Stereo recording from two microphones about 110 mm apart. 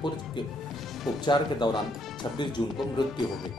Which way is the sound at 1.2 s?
45° left (ahead or behind).